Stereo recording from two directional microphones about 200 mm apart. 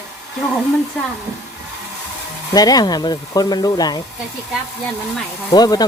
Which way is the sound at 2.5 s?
20° left (ahead or behind).